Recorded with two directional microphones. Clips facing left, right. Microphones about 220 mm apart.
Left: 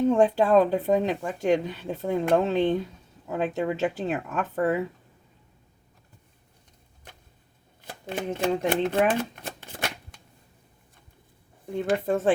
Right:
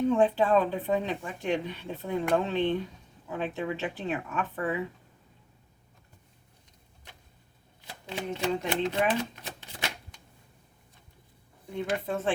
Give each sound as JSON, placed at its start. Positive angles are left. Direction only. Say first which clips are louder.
{"t": 0.1, "sound": "speech", "louder": "left 3 dB", "side_deg": 40}
{"t": 7.8, "sound": "speech", "louder": "left 4 dB", "side_deg": 50}
{"t": 11.9, "sound": "speech", "louder": "left 7 dB", "side_deg": 45}